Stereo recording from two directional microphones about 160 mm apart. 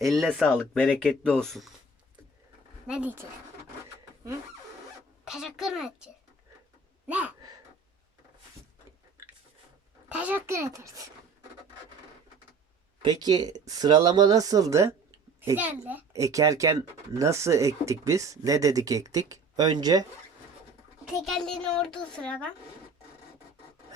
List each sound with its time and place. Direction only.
0.0 s a child's voice: centre (ahead or behind)
2.8 s a child's voice: 10° right (ahead or behind)
5.2 s a child's voice: 5° right (ahead or behind)
7.1 s a child's voice: 10° right (ahead or behind)
10.1 s a child's voice: 10° right (ahead or behind)
13.0 s a child's voice: 25° right (ahead or behind)
21.0 s a child's voice: centre (ahead or behind)